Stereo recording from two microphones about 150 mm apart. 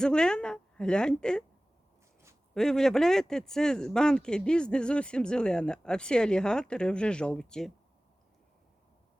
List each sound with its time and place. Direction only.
0.0 s speech: 5° left (ahead or behind)
2.6 s speech: 5° left (ahead or behind)